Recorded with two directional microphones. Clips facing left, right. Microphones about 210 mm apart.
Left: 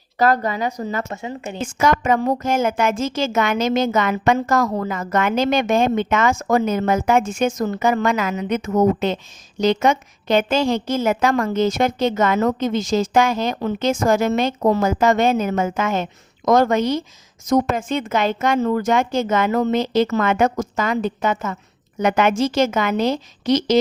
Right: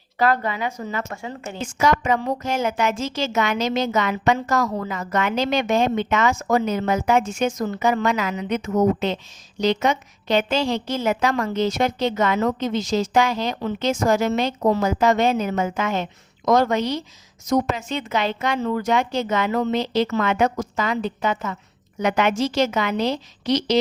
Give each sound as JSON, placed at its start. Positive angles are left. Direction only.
{"t": 0.2, "sound": "a woman's voice", "side_deg": 40}
{"t": 1.1, "sound": "speech", "side_deg": 20}
{"t": 1.6, "sound": "a woman's voice", "side_deg": 50}